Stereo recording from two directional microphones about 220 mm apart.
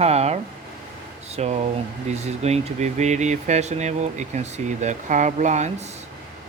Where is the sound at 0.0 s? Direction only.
30° right (ahead or behind).